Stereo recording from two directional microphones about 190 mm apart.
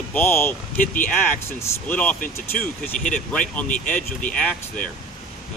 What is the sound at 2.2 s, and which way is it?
Speech, 50° left (ahead or behind).